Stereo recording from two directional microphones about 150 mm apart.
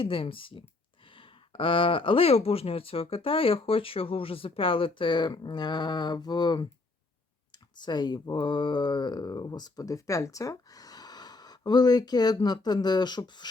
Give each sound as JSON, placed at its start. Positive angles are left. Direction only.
{"t": 0.0, "sound": "speech", "side_deg": 35}